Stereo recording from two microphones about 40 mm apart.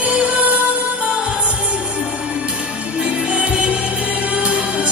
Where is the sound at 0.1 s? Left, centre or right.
Right.